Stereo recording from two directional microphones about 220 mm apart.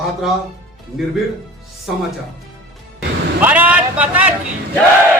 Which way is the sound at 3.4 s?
5° right (ahead or behind).